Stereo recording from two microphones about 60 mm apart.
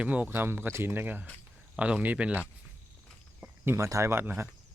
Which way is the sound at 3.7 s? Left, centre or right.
Right.